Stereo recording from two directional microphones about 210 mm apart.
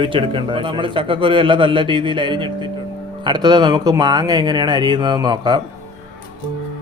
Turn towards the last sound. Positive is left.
turn(degrees=-20)  # may be behind; listen again after turning